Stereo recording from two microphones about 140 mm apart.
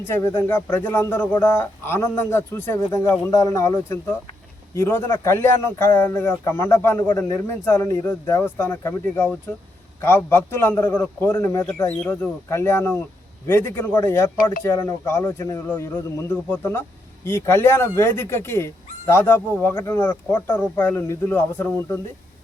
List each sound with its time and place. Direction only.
0.0 s speech: 20° left (ahead or behind)